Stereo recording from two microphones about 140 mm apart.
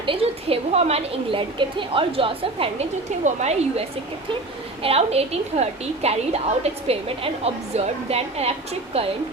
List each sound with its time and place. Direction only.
0.0 s a woman's voice: 40° right (ahead or behind)
3.2 s a woman's voice: 50° right (ahead or behind)